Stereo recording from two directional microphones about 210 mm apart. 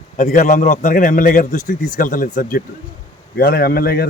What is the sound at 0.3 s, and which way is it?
A man's voice, 40° left (ahead or behind).